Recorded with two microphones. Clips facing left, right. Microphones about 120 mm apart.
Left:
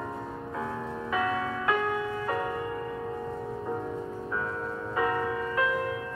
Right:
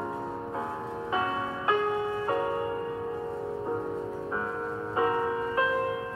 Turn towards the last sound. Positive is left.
turn(degrees=-30)  # may be behind; listen again after turning